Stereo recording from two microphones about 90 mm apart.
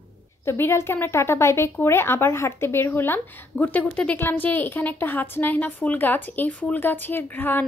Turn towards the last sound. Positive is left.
turn(degrees=20)  # may be behind; listen again after turning